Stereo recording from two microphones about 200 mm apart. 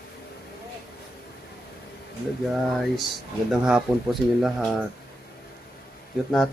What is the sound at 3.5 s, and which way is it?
Speech, 5° right (ahead or behind).